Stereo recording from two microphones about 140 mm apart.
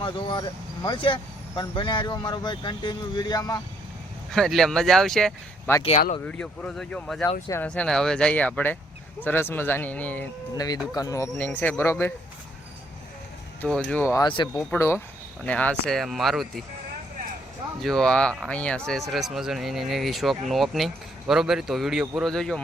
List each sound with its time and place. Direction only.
0.0 s speech: 35° left (ahead or behind)
4.3 s speech: 5° left (ahead or behind)
5.7 s speech: 15° left (ahead or behind)
10.5 s speech: 30° left (ahead or behind)
11.3 s speech: 10° left (ahead or behind)
13.6 s speech: 10° left (ahead or behind)
14.2 s speech: 35° left (ahead or behind)
14.7 s speech: 20° left (ahead or behind); by 16.6 s centre (ahead or behind)
17.7 s speech: 5° left (ahead or behind)